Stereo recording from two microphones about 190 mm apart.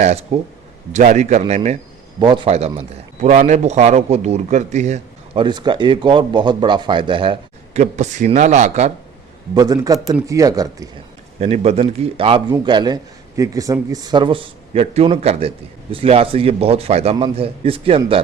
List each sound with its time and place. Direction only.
0.0 s a man's voice: 35° right (ahead or behind)
2.1 s a man's voice: 25° right (ahead or behind)
9.6 s speech: 20° right (ahead or behind)
11.3 s a man's voice: 35° right (ahead or behind)